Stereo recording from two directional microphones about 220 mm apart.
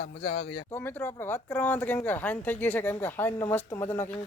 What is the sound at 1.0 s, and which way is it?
Speech, 10° left (ahead or behind).